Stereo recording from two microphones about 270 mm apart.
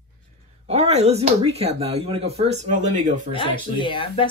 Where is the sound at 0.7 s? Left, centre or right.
Right.